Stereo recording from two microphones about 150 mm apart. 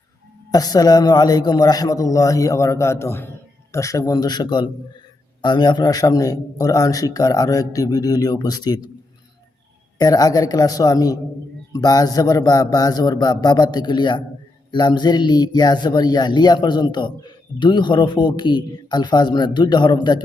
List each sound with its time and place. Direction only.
0.5 s a man's voice: 25° left (ahead or behind)
10.0 s a man's voice: 25° left (ahead or behind)